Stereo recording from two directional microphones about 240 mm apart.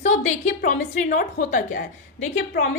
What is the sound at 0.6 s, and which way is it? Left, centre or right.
A woman's voice, left.